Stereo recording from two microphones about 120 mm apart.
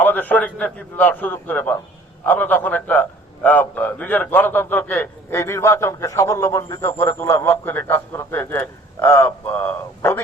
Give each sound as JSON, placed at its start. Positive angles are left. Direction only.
{"t": 0.0, "sound": "a man's voice", "side_deg": 15}